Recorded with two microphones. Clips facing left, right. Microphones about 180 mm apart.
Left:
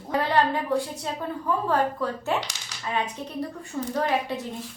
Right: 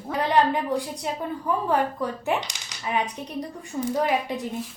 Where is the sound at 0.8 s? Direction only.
15° right (ahead or behind).